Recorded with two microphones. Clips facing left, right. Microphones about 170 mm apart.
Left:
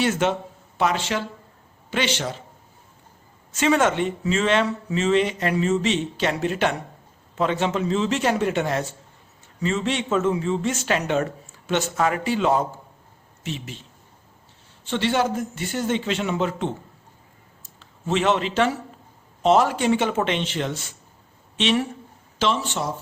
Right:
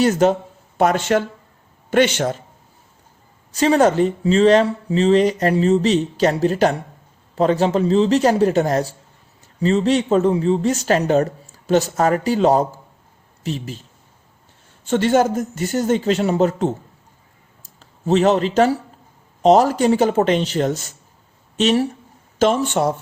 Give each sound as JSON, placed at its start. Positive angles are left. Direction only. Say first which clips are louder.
{"t": 0.0, "sound": "speech", "louder": "right 6 dB", "side_deg": -40}
{"t": 3.5, "sound": "speech", "louder": "right 5 dB", "side_deg": -35}
{"t": 14.8, "sound": "speech", "louder": "right 6 dB", "side_deg": -45}
{"t": 17.7, "sound": "a man's voice", "louder": "right 7 dB", "side_deg": -40}